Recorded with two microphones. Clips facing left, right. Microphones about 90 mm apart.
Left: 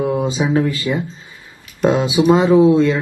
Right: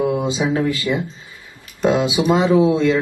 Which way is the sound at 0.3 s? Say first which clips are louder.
Left 2 dB; 40° left (ahead or behind).